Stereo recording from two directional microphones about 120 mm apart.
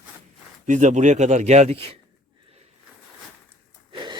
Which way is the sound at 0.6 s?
90° right.